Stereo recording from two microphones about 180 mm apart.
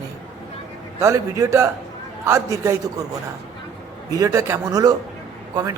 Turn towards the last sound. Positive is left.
turn(degrees=-20)  # may be behind; listen again after turning